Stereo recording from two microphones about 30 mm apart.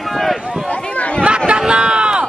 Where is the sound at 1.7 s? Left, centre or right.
Right.